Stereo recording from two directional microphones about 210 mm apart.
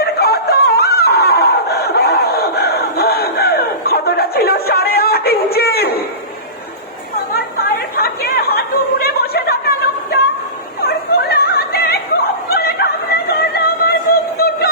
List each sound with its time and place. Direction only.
0.0 s chicken: 50° left (ahead or behind)
7.6 s chatter: 45° left (ahead or behind)
10.8 s opera: 50° left (ahead or behind)
12.5 s a sound: 50° left (ahead or behind)
14.3 s music: 50° left (ahead or behind)